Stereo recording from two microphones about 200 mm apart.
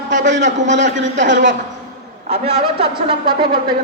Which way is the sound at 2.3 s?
30° right (ahead or behind).